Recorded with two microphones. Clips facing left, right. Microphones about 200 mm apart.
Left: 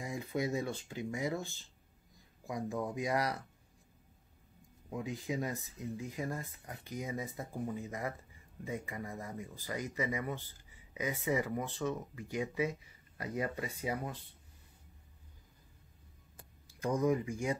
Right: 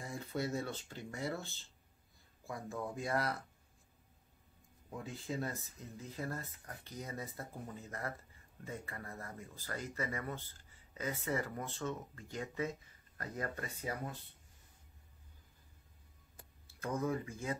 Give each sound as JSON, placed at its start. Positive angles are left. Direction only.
{"t": 0.0, "sound": "speech", "side_deg": 15}
{"t": 4.9, "sound": "speech", "side_deg": 15}
{"t": 16.6, "sound": "speech", "side_deg": 15}